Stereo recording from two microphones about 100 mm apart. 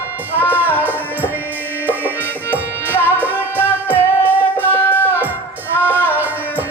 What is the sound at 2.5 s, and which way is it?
Music, 20° left (ahead or behind).